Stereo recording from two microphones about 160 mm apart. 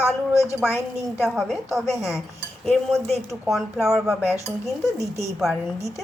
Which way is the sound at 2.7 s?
Centre (ahead or behind).